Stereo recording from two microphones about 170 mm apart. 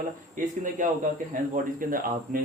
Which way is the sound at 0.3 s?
50° right (ahead or behind).